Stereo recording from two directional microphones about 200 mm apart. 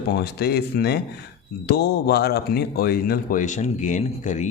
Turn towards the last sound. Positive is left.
turn(degrees=40)  # may be behind; listen again after turning